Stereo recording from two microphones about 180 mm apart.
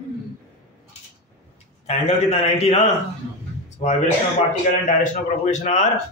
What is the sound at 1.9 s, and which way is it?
A man's voice, 35° left (ahead or behind).